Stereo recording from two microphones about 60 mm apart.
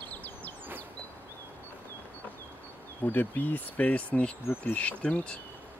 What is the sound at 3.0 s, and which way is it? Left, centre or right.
Speech, left.